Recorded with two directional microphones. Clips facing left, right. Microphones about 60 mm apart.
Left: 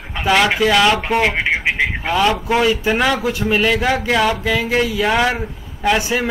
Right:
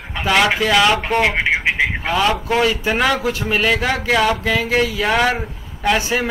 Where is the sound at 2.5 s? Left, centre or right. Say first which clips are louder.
Left 1 dB; centre.